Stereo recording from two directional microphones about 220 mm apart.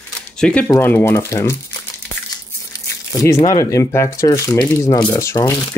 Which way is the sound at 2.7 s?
15° left (ahead or behind).